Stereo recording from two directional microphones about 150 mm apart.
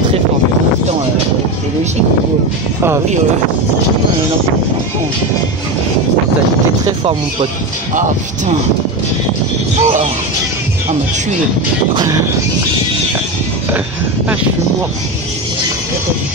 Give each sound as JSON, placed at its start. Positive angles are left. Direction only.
{"t": 7.9, "sound": "speech", "side_deg": -60}
{"t": 9.8, "sound": "speech", "side_deg": -45}
{"t": 11.9, "sound": "music", "side_deg": -25}